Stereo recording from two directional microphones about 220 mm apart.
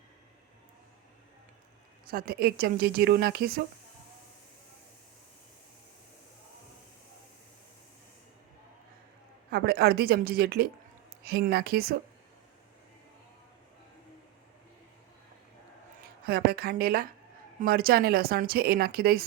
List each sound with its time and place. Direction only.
2.0 s a woman's voice: 40° right (ahead or behind)
9.5 s a woman's voice: 45° right (ahead or behind)
16.2 s a woman's voice: 45° right (ahead or behind)